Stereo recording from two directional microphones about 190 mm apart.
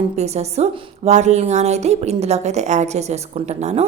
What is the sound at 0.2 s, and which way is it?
A woman's voice, 35° right (ahead or behind).